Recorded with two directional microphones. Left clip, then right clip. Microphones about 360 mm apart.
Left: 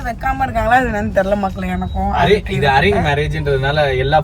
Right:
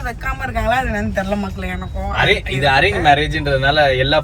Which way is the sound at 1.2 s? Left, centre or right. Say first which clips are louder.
Left 6 dB; left.